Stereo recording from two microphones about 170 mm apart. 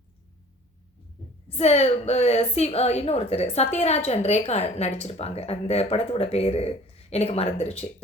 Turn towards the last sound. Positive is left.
turn(degrees=40)  # may be behind; listen again after turning